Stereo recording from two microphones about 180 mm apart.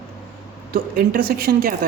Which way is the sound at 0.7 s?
55° right (ahead or behind).